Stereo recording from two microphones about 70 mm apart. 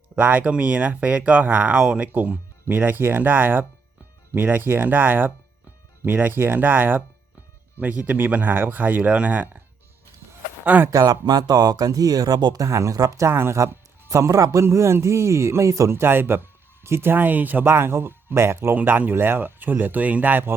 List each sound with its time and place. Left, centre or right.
0.2 s speech: right
10.9 s speech: right
12.6 s speech: right
13.3 s music: right
14.1 s a man's voice: right
18.8 s speech: right